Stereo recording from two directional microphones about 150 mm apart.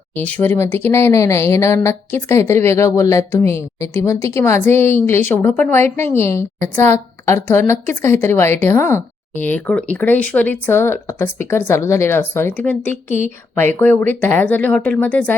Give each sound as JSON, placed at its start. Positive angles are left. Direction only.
{"t": 0.2, "sound": "speech", "side_deg": 10}
{"t": 13.1, "sound": "a woman's voice", "side_deg": 55}
{"t": 13.6, "sound": "speech", "side_deg": 15}